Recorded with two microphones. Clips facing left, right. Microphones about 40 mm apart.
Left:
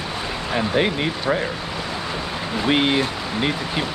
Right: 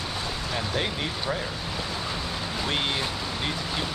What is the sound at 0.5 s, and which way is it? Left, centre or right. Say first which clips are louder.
Speech: left 10 dB; left.